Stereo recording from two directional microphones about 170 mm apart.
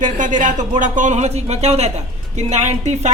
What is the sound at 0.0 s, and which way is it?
Speech, 50° right (ahead or behind).